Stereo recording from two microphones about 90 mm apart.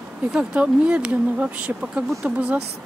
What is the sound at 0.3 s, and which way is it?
Speech, 10° right (ahead or behind).